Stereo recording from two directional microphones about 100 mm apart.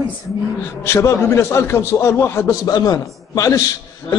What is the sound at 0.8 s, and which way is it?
A man's voice, 30° left (ahead or behind).